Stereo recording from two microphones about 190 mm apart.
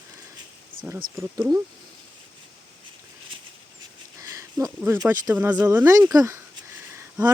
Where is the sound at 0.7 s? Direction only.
90° right.